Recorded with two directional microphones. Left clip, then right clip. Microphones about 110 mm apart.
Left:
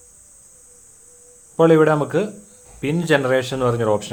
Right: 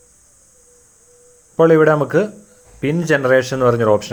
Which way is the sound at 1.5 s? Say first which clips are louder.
Right 3 dB; 25° right (ahead or behind).